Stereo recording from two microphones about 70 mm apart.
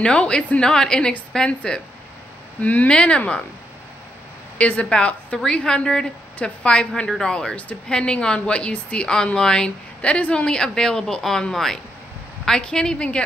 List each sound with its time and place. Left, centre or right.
0.0 s a woman's voice: centre
4.6 s a woman's voice: centre